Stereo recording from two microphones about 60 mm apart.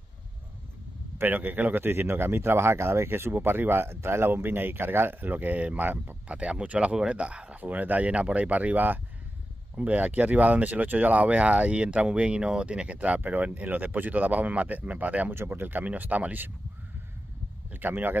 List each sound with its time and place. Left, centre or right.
1.1 s speech: right
15.3 s speech: right
15.8 s speech: right
17.6 s speech: right